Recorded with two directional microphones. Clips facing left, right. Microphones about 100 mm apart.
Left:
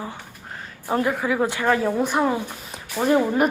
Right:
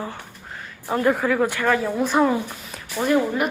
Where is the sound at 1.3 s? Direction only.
20° left (ahead or behind).